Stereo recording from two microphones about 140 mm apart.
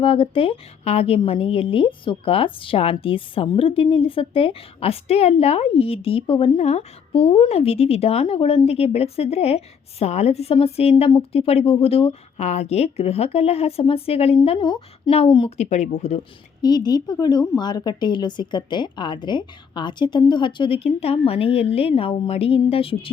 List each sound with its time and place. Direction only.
0.0 s a woman's voice: 40° left (ahead or behind)
15.5 s speech: 55° left (ahead or behind)
16.6 s a woman's voice: 30° left (ahead or behind)